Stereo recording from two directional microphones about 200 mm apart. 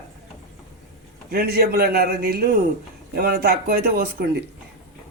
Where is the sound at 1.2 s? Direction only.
50° right (ahead or behind).